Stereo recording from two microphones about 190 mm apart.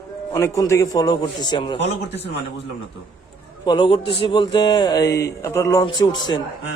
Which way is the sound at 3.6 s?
25° left (ahead or behind).